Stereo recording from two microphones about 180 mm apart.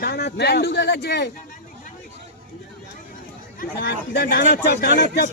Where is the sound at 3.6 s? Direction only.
60° left (ahead or behind).